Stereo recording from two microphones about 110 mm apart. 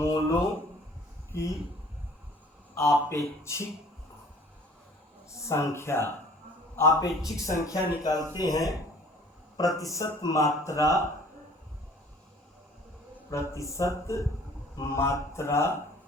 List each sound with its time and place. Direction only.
0.0 s a sound: 25° left (ahead or behind)
1.3 s speech: 25° left (ahead or behind)
2.7 s speech: 25° left (ahead or behind)
5.3 s a man's voice: 25° left (ahead or behind)
13.3 s speech: 25° left (ahead or behind)